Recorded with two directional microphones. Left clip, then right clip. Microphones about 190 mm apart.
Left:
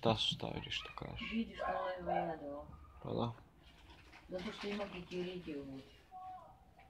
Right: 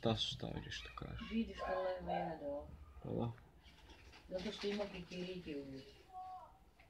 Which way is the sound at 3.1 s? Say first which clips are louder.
Left 4 dB; 10° right (ahead or behind).